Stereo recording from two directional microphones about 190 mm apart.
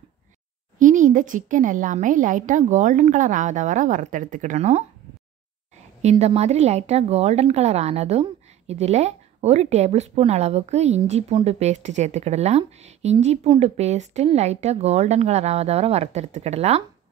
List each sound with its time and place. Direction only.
0.7 s a woman's voice: 40° right (ahead or behind)
6.0 s speech: 35° right (ahead or behind)